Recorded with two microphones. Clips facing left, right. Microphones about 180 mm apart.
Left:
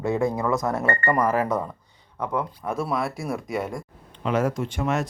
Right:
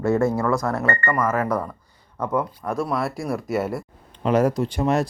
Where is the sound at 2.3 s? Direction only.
Centre (ahead or behind).